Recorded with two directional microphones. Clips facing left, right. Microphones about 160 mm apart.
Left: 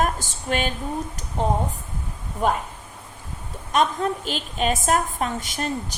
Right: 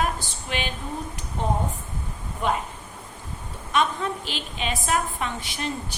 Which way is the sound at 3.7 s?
40° left (ahead or behind).